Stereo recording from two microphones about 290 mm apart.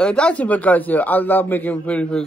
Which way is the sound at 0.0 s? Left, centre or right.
Centre.